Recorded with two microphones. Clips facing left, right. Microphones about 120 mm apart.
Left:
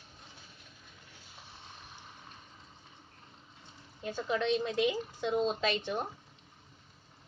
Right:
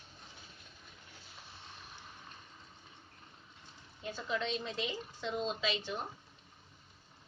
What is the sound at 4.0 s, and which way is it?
Speech, 50° left (ahead or behind).